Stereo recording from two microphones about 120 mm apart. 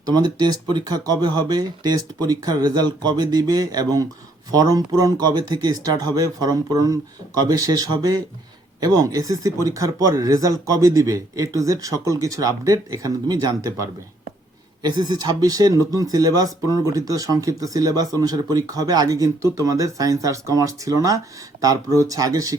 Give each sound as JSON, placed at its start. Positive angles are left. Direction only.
{"t": 0.0, "sound": "speech", "side_deg": -35}